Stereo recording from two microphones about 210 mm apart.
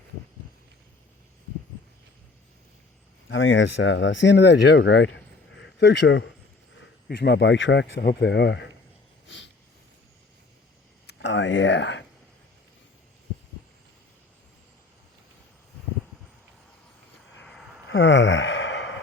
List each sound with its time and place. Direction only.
3.2 s speech: 65° left (ahead or behind)
9.2 s a sound: 60° left (ahead or behind)
11.0 s speech: 60° left (ahead or behind)
17.8 s gasp: 60° left (ahead or behind)